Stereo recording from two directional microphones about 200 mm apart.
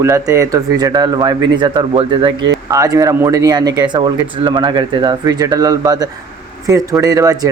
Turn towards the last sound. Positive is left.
turn(degrees=-15)  # may be behind; listen again after turning